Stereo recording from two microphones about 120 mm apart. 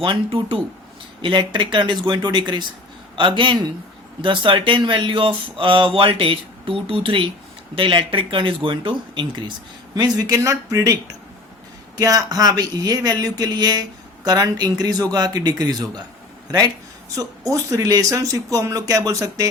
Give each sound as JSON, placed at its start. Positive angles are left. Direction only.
{"t": 0.0, "sound": "speech", "side_deg": -45}
{"t": 9.9, "sound": "speech", "side_deg": -30}
{"t": 17.2, "sound": "speech", "side_deg": -30}